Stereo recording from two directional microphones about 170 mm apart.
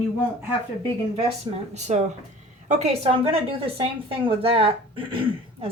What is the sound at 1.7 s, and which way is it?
Speech, 40° right (ahead or behind).